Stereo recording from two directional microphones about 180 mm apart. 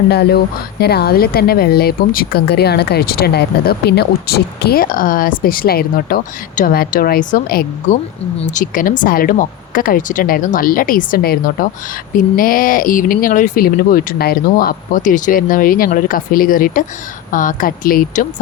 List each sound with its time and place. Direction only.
0.1 s speech: 65° left (ahead or behind)
8.4 s speech: 45° left (ahead or behind)